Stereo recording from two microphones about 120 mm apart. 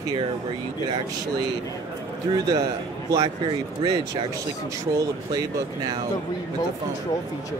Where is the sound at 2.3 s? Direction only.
35° right (ahead or behind).